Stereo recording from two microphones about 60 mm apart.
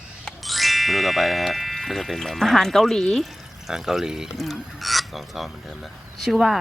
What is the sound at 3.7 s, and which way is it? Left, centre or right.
Speech, centre.